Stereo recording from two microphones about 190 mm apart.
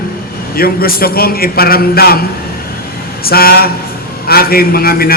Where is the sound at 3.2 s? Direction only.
50° left (ahead or behind).